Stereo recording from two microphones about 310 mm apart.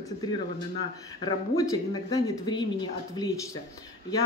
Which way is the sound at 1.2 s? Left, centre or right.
Centre.